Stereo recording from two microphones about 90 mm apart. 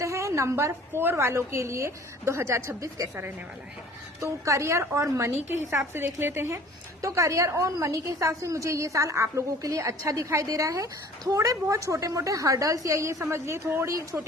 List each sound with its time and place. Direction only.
0.0 s a woman's voice: 35° right (ahead or behind)